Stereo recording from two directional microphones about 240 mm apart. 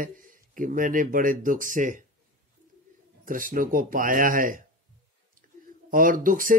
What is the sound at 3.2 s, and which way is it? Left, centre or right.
Speech, right.